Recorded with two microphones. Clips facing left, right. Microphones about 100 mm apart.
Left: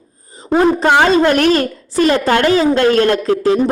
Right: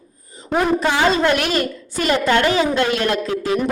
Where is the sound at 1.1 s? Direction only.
45° left (ahead or behind).